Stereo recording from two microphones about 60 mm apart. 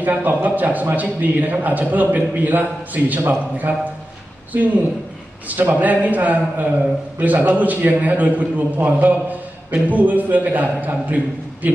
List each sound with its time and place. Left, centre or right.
0.0 s a man's voice: right
5.5 s a man's voice: right